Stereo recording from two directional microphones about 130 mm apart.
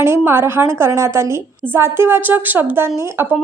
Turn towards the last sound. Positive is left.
turn(degrees=-20)  # may be behind; listen again after turning